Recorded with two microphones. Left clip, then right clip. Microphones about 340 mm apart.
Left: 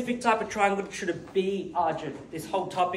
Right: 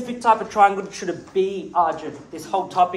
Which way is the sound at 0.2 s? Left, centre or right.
Centre.